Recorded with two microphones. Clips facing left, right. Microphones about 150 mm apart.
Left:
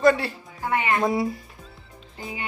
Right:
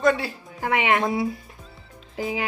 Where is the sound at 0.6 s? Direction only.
90° right.